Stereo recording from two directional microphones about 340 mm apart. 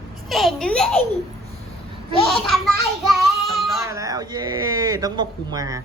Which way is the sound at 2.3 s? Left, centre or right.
Centre.